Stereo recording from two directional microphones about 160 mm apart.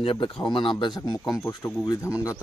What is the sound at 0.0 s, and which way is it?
A man's voice, 30° left (ahead or behind).